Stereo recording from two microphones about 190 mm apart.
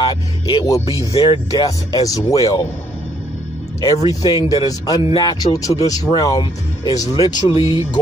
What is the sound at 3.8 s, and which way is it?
Speech, 20° left (ahead or behind).